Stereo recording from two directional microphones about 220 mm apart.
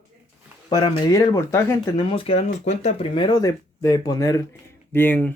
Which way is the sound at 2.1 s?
25° left (ahead or behind).